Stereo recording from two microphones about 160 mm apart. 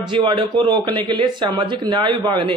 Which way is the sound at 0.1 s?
30° right (ahead or behind).